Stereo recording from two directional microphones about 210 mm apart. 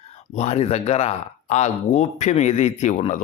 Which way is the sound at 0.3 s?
30° left (ahead or behind).